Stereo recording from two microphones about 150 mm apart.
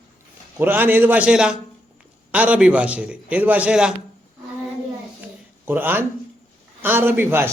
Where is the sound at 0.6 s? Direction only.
10° right (ahead or behind).